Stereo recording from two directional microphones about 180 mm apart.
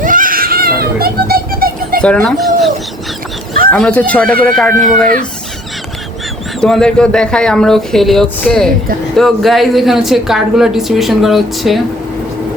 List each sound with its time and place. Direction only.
0.0 s a sound: 50° right (ahead or behind)
2.0 s speech: 5° left (ahead or behind)
3.7 s speech: 5° left (ahead or behind)
6.6 s speech: 5° left (ahead or behind)